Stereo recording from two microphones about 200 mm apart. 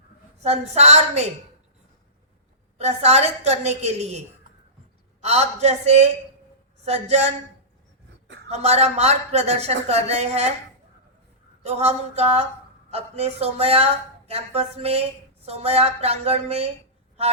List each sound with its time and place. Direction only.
0.4 s a woman's voice: 35° right (ahead or behind)
2.7 s a woman's voice: 30° right (ahead or behind)
5.2 s a woman's voice: 35° right (ahead or behind)
8.4 s a woman's voice: 30° right (ahead or behind)
11.6 s a woman's voice: 30° right (ahead or behind)